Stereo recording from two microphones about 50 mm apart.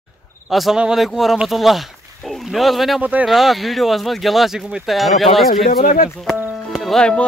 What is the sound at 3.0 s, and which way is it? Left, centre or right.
Speech, right.